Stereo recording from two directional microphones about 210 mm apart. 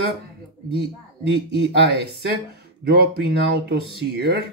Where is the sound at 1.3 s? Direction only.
55° right (ahead or behind).